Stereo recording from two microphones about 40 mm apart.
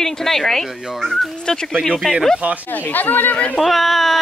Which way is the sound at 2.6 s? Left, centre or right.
Left.